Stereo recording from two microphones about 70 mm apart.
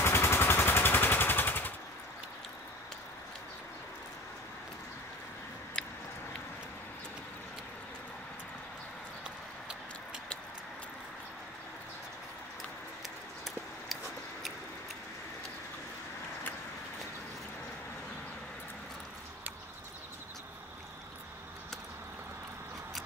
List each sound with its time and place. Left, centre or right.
0.0 s vehicle: left
5.8 s biting: centre